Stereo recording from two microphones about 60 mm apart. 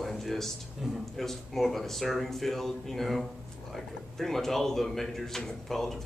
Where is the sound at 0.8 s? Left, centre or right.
Centre.